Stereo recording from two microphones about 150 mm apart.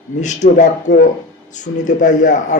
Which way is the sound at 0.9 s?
90° left.